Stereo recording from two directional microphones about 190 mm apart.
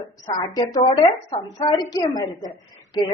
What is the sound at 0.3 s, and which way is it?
A woman's voice, 20° left (ahead or behind).